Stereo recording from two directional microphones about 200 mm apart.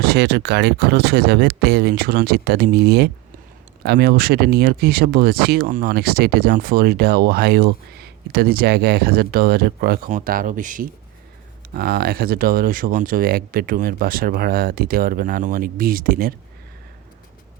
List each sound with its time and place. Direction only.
0.0 s speech: 55° right (ahead or behind)